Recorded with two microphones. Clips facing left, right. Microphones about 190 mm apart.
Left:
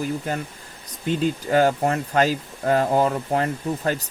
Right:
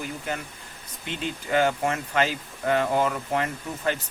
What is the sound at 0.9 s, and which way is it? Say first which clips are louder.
Speech: left 9 dB; 40° left (ahead or behind).